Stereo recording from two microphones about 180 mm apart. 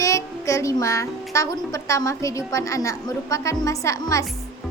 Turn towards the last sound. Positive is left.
turn(degrees=15)  # may be behind; listen again after turning